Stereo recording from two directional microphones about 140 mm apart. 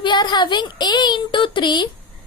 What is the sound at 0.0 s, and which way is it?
A woman's voice, 30° left (ahead or behind).